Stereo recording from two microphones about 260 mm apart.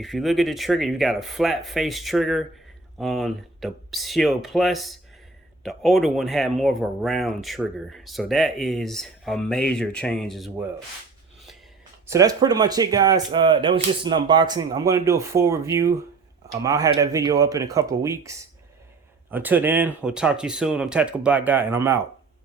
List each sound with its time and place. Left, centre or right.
0.0 s speech: centre
12.0 s speech: centre